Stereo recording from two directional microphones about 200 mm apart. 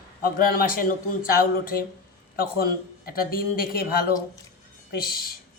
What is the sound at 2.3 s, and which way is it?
A man's voice, 50° left (ahead or behind).